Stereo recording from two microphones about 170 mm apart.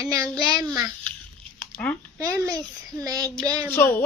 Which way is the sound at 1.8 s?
5° left (ahead or behind).